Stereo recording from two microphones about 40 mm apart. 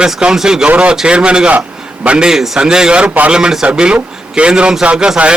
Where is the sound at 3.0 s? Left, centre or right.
Right.